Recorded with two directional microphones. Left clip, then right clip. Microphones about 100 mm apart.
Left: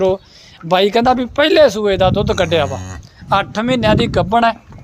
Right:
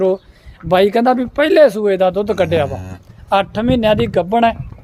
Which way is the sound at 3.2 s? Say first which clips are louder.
Even; 55° right (ahead or behind).